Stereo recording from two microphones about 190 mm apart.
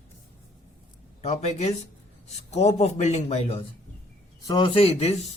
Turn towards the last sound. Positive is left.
turn(degrees=30)  # may be behind; listen again after turning